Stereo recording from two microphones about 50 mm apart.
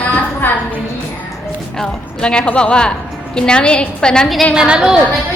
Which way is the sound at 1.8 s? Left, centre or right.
Centre.